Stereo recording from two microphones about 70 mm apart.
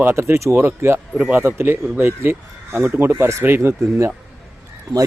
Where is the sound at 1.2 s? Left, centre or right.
Right.